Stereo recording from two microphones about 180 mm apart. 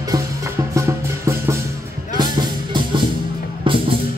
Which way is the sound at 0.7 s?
15° right (ahead or behind).